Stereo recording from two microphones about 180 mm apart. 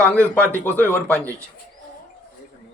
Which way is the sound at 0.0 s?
5° left (ahead or behind).